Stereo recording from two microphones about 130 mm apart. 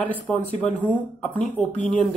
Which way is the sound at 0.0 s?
10° left (ahead or behind).